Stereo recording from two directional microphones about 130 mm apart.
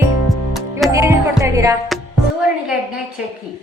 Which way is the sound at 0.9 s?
20° right (ahead or behind).